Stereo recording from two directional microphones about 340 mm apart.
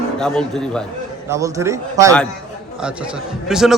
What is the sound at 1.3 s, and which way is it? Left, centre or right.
Speech, centre.